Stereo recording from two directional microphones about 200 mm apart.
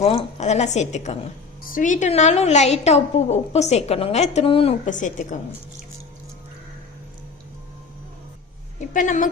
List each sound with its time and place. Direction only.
0.0 s a woman's voice: 30° left (ahead or behind)
8.9 s a woman's voice: 40° left (ahead or behind)